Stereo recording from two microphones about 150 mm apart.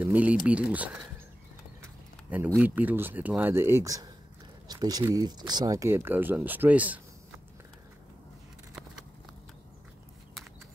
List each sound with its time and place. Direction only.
0.0 s speech: 10° right (ahead or behind)
2.3 s speech: 10° right (ahead or behind)